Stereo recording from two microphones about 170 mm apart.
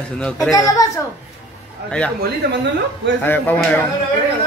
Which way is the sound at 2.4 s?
75° right (ahead or behind).